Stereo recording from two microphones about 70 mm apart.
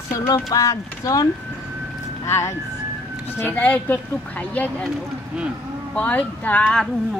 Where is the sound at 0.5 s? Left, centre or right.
Left.